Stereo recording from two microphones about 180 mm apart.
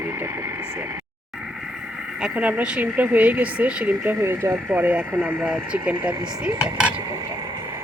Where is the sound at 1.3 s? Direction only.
Centre (ahead or behind).